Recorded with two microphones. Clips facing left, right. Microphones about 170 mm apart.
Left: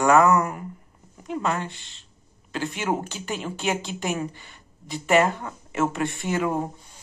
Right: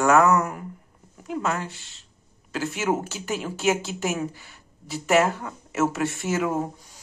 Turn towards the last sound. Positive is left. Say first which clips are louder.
# even
turn(degrees=-5)  # may be behind; listen again after turning